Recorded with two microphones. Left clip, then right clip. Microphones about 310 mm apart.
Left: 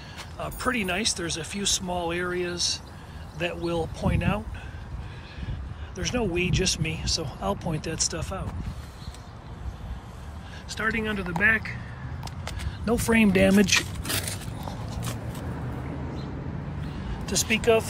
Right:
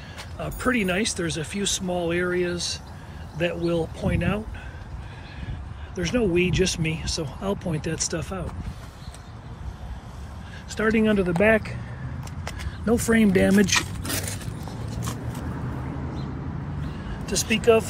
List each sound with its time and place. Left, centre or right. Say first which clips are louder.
0.4 s speech: right 3 dB; centre
5.9 s speech: right 4 dB; centre
10.8 s speech: right 6 dB; centre
12.4 s speech: right 3 dB; centre
17.3 s speech: right 2 dB; left